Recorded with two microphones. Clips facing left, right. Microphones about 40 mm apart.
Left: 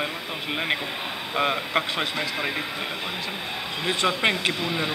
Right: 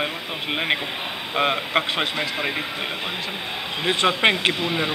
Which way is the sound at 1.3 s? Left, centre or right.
Centre.